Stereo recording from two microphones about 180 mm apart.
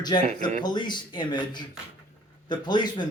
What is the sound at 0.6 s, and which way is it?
Speech, 25° left (ahead or behind).